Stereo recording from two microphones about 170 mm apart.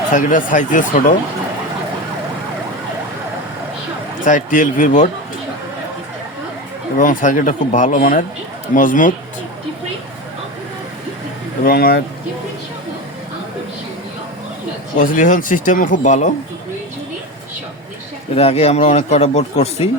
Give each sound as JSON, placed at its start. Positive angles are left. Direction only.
{"t": 0.1, "sound": "speech", "side_deg": 50}
{"t": 4.3, "sound": "speech", "side_deg": 50}
{"t": 7.0, "sound": "speech", "side_deg": 50}
{"t": 11.6, "sound": "speech", "side_deg": 60}
{"t": 14.9, "sound": "speech", "side_deg": 50}
{"t": 18.3, "sound": "speech", "side_deg": 35}